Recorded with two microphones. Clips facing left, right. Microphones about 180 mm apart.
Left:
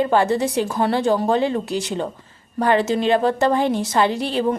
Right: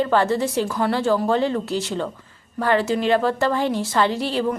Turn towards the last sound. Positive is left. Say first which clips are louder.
# left 2 dB
turn(degrees=20)  # may be behind; listen again after turning